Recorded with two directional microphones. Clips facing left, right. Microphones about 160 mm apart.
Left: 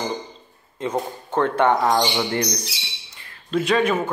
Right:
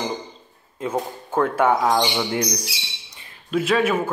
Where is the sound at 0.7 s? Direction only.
5° right (ahead or behind).